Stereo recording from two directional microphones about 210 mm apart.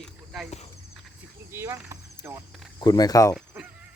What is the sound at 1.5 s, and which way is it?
Speech, 15° right (ahead or behind).